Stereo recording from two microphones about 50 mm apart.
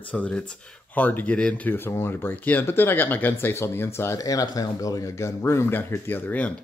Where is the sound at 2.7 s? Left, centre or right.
Left.